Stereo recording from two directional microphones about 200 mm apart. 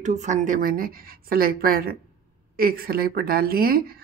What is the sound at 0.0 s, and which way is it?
Speech, 35° right (ahead or behind).